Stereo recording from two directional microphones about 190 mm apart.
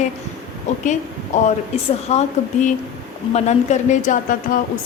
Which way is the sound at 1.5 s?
35° left (ahead or behind).